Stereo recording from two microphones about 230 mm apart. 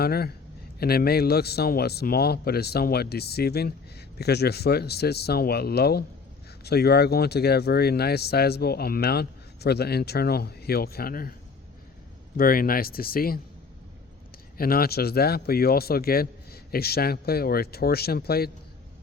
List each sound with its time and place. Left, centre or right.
0.0 s speech: left
12.4 s a man's voice: left
14.6 s a man's voice: left